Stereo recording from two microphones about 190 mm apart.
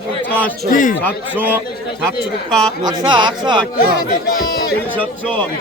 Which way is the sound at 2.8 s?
25° right (ahead or behind).